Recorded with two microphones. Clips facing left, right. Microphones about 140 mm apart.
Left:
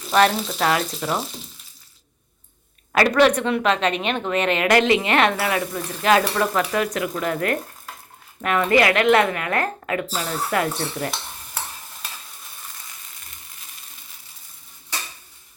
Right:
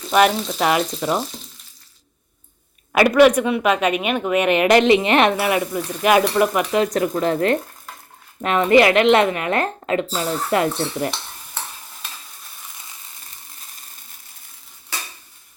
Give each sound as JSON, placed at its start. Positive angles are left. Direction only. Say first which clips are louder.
{"t": 0.1, "sound": "frying", "louder": "right 2 dB", "side_deg": -10}
{"t": 1.0, "sound": "speech", "louder": "right 3 dB", "side_deg": -5}
{"t": 2.9, "sound": "speech", "louder": "right 4 dB", "side_deg": -10}
{"t": 6.9, "sound": "a woman's voice", "louder": "right 5 dB", "side_deg": -35}